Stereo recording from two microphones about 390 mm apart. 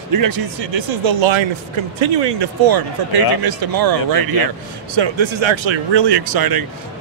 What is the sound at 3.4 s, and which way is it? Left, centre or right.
Speech, right.